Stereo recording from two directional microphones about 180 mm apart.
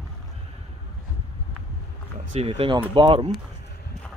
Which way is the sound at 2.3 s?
35° right (ahead or behind).